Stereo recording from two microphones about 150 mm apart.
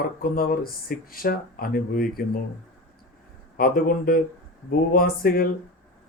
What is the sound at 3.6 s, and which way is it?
Speech, 75° left (ahead or behind).